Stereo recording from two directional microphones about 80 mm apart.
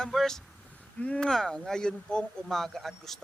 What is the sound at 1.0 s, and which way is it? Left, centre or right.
Speech, centre.